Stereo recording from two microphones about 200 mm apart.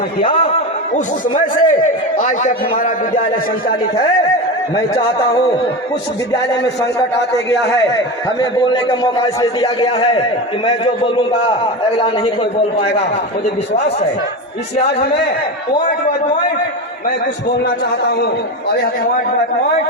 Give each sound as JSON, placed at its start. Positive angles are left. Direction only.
{"t": 0.3, "sound": "speech", "side_deg": 25}
{"t": 0.9, "sound": "a man's voice", "side_deg": 35}
{"t": 4.7, "sound": "a man's voice", "side_deg": 25}
{"t": 7.2, "sound": "a man's voice", "side_deg": 60}
{"t": 7.7, "sound": "a man's voice", "side_deg": 20}